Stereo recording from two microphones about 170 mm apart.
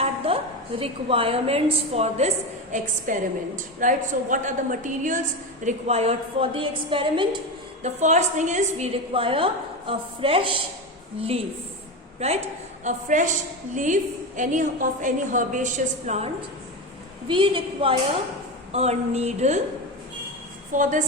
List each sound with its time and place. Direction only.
0.2 s a sound: 35° right (ahead or behind)
0.8 s a woman's voice: 30° right (ahead or behind)
2.7 s a woman's voice: 50° right (ahead or behind)
5.6 s a woman's voice: 40° right (ahead or behind)
20.7 s a woman's voice: 50° right (ahead or behind)